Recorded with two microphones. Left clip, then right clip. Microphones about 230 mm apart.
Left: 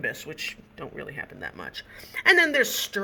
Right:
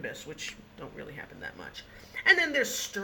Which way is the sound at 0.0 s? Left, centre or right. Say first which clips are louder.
Left 7 dB; left.